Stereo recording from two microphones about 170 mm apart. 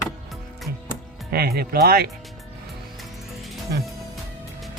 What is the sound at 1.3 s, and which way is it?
Speech, 60° right (ahead or behind).